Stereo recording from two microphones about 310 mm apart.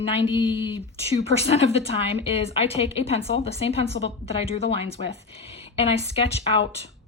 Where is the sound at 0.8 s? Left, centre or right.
Centre.